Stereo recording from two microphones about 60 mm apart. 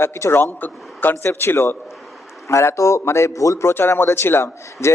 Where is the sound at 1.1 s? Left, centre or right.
Left.